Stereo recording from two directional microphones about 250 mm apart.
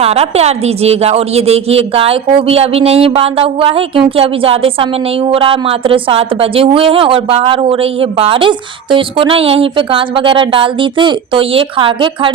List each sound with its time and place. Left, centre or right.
0.0 s a woman's voice: right